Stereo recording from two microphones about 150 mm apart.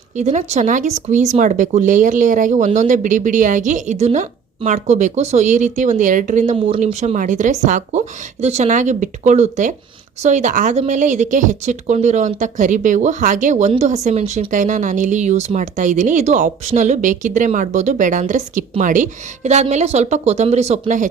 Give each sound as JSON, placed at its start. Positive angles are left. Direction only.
{"t": 0.2, "sound": "speech", "side_deg": -50}